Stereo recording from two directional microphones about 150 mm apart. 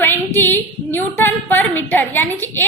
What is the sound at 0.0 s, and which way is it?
A woman's voice, 15° left (ahead or behind).